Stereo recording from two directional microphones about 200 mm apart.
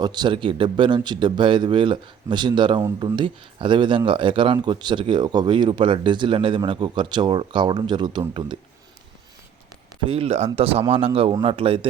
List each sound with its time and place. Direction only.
0.0 s a man's voice: 20° right (ahead or behind)
10.1 s a man's voice: 30° right (ahead or behind)